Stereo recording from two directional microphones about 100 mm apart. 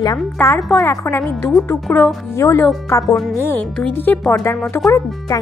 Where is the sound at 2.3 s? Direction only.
30° left (ahead or behind).